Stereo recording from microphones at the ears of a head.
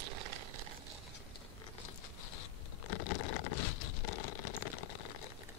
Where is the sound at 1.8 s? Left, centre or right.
Left.